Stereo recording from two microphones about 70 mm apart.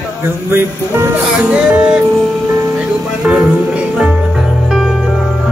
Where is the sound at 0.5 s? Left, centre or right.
Right.